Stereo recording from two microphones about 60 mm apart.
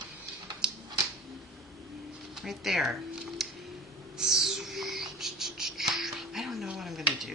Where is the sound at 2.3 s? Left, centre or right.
Centre.